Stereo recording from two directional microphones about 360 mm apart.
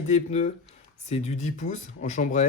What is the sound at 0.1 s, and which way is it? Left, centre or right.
Speech, centre.